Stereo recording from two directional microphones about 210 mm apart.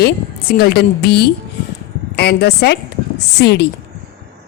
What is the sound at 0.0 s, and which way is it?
A woman's voice, 50° left (ahead or behind).